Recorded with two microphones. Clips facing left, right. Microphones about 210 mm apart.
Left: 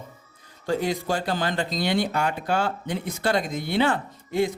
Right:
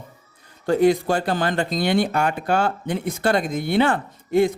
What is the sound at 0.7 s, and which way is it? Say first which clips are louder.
Speech: right 7 dB; 55° right (ahead or behind).